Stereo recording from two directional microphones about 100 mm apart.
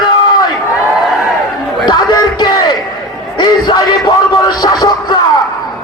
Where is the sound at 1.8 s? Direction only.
45° left (ahead or behind).